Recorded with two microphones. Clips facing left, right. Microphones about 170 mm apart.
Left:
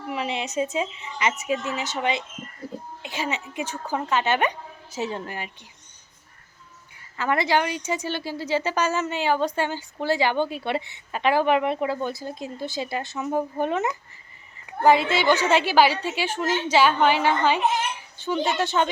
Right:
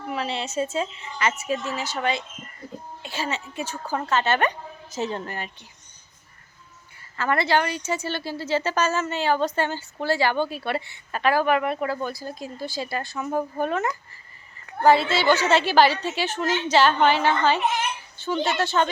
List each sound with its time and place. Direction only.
0.1 s speech: 15° left (ahead or behind)
7.2 s speech: 15° left (ahead or behind)